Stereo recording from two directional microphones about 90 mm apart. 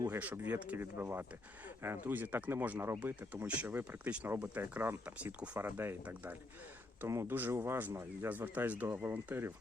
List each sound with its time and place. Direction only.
0.2 s speech: 15° right (ahead or behind)